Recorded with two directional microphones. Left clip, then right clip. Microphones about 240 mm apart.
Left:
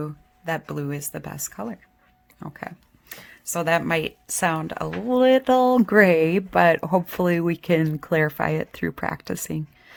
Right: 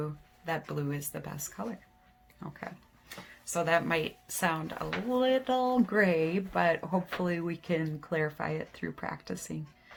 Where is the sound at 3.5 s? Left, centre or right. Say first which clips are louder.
Left 6 dB; left.